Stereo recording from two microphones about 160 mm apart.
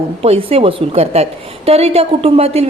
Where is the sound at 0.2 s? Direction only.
35° right (ahead or behind).